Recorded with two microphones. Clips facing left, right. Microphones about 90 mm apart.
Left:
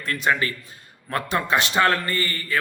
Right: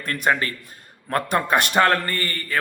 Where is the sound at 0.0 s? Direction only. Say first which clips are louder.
Right 1 dB; 45° right (ahead or behind).